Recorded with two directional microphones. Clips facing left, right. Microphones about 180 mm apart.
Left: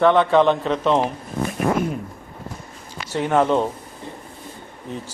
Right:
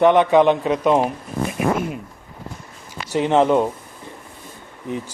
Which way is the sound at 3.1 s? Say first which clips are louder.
Right 2 dB; 20° right (ahead or behind).